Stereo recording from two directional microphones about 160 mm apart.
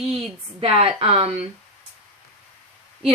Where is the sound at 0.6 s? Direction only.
40° right (ahead or behind).